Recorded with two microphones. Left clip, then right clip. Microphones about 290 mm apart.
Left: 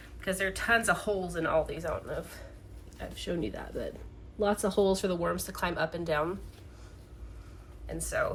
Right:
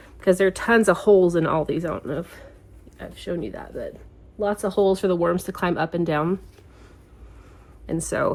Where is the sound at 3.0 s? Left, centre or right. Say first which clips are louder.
Right 5 dB; centre.